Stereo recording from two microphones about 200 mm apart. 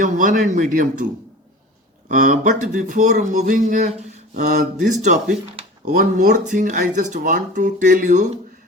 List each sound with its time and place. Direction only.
0.0 s speech: 40° right (ahead or behind)
2.0 s speech: 40° right (ahead or behind)